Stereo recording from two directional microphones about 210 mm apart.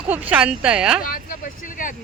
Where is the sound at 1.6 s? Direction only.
40° left (ahead or behind).